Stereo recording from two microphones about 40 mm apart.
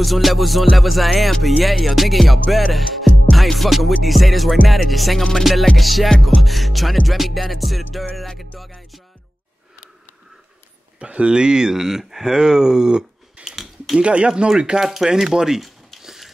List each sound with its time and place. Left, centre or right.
0.0 s music: centre
11.0 s speech: right
13.4 s a sound: right
13.9 s speech: right
14.8 s speech: centre
16.0 s ratchet: centre